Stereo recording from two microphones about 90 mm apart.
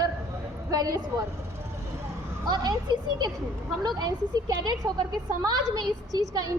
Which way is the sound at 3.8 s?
50° right (ahead or behind).